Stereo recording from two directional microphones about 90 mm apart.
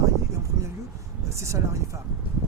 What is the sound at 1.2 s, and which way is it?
Speech, 35° right (ahead or behind).